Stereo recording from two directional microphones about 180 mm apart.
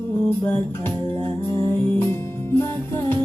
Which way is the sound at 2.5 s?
15° left (ahead or behind).